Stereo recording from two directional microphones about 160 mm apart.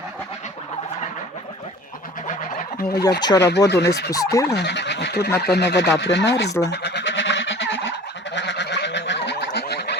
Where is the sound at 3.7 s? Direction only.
90° left.